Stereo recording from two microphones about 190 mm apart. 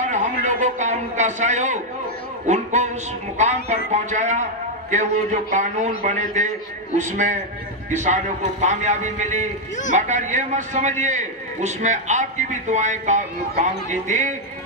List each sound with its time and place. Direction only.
0.0 s a man's voice: 40° right (ahead or behind)